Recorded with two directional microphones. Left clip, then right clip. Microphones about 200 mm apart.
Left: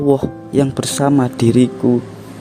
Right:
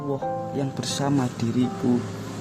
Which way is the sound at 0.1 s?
45° left (ahead or behind).